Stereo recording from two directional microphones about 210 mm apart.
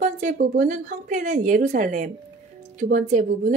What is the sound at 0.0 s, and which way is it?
A woman's voice, 35° right (ahead or behind).